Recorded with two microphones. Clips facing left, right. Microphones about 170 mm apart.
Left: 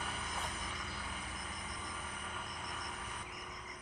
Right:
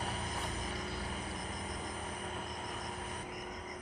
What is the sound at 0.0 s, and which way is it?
Vehicle, 35° right (ahead or behind).